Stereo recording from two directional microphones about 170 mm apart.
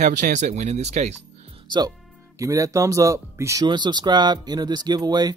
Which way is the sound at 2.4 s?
20° right (ahead or behind).